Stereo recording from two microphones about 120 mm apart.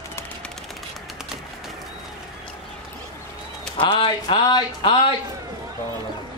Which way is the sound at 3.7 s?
45° left (ahead or behind).